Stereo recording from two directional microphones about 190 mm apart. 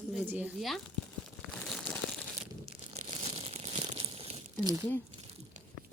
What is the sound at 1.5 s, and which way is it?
Crumpling, 5° left (ahead or behind).